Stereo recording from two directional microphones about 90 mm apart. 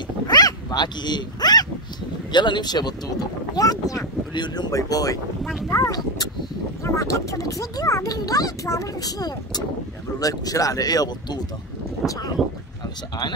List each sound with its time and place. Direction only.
0.3 s wild animals: 50° left (ahead or behind)
2.3 s speech: 60° left (ahead or behind); by 4.0 s 40° left (ahead or behind)
4.3 s speech: 55° left (ahead or behind)
12.0 s speech: centre (ahead or behind)